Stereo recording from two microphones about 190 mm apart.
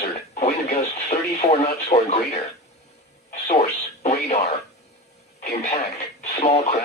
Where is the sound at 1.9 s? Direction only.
35° left (ahead or behind).